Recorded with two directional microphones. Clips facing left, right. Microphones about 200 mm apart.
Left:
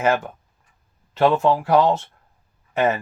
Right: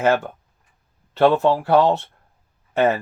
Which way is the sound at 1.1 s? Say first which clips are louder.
Right 1 dB; 35° right (ahead or behind).